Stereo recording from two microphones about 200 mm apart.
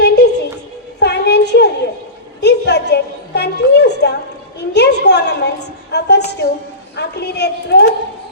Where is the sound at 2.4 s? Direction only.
55° left (ahead or behind).